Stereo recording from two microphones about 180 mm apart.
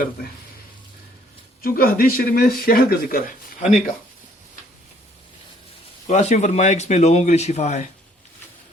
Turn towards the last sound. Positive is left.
turn(degrees=40)  # may be behind; listen again after turning